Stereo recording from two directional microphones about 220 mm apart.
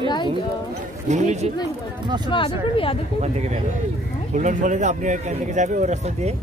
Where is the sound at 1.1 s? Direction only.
30° right (ahead or behind).